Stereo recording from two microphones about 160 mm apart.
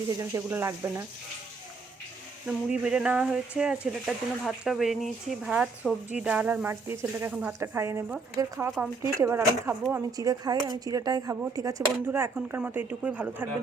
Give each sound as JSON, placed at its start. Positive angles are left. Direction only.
{"t": 0.2, "sound": "speech", "side_deg": -15}
{"t": 2.5, "sound": "speech", "side_deg": -5}